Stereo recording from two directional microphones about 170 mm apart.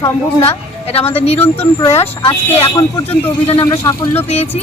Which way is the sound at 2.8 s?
15° left (ahead or behind).